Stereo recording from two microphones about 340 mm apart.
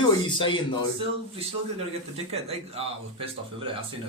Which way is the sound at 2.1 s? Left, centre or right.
Centre.